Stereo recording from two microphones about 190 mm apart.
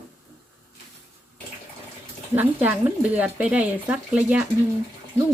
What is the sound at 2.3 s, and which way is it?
Speech, 10° right (ahead or behind).